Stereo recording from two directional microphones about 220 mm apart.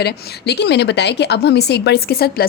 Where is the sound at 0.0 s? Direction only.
50° left (ahead or behind).